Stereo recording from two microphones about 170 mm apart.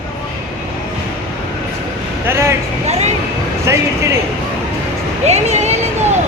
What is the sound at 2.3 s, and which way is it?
Vehicle, 15° right (ahead or behind).